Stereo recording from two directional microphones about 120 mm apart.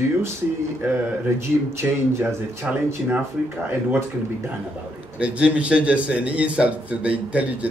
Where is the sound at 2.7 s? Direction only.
10° right (ahead or behind).